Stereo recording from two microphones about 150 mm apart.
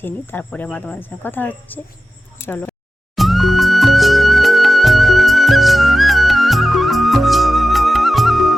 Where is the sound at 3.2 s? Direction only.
Centre (ahead or behind).